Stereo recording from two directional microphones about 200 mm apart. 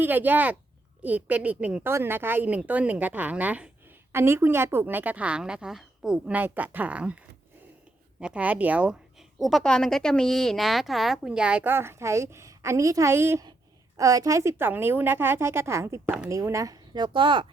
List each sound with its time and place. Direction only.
0.0 s a woman's voice: 10° right (ahead or behind)